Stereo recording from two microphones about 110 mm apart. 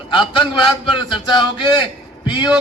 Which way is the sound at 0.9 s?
45° left (ahead or behind).